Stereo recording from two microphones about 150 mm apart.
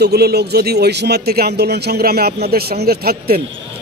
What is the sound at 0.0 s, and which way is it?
Speech, 90° right.